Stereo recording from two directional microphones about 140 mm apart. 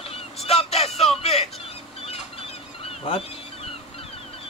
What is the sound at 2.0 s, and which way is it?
Fowl, 45° left (ahead or behind).